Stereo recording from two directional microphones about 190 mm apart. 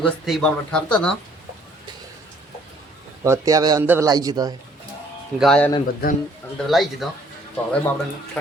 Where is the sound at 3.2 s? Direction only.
15° right (ahead or behind).